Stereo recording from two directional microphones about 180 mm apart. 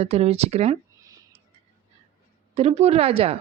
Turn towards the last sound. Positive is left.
turn(degrees=-35)  # may be behind; listen again after turning